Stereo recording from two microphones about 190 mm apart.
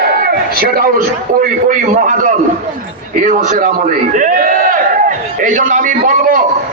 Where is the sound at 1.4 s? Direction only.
40° right (ahead or behind).